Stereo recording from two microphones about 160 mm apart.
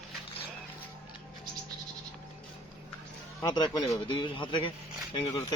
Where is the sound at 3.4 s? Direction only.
25° left (ahead or behind).